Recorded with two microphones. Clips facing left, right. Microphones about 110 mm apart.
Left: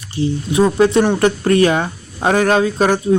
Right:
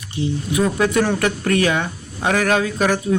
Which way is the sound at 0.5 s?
30° left (ahead or behind).